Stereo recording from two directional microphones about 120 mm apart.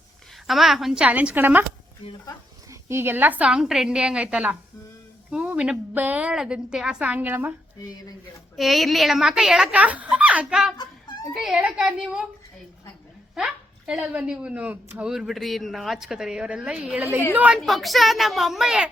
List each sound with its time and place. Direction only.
0.4 s a woman's voice: centre (ahead or behind)
2.9 s a woman's voice: 20° right (ahead or behind)
7.8 s speech: 30° left (ahead or behind)
8.5 s speech: centre (ahead or behind)
10.8 s a sound: 40° left (ahead or behind)
11.3 s a woman's voice: 5° right (ahead or behind)
13.3 s a woman's voice: 5° right (ahead or behind)
17.6 s speech: centre (ahead or behind)